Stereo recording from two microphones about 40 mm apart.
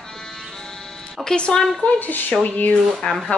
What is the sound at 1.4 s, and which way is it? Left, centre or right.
Speech, left.